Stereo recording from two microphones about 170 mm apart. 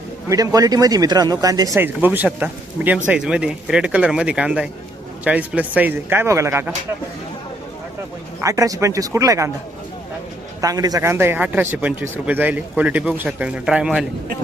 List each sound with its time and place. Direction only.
0.3 s a man's voice: 20° right (ahead or behind)
8.4 s speech: 20° right (ahead or behind)
10.6 s a man's voice: 20° right (ahead or behind); by 14.0 s 5° right (ahead or behind)